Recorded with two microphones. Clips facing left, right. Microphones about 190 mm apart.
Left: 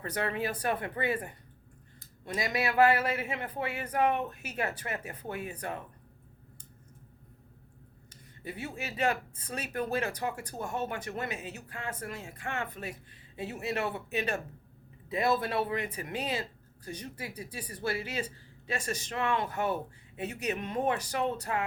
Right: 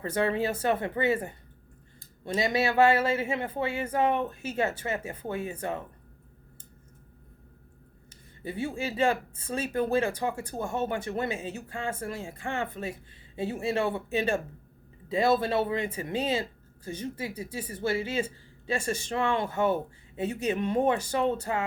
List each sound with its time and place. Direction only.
0.0 s speech: 30° right (ahead or behind)
8.1 s speech: 30° right (ahead or behind)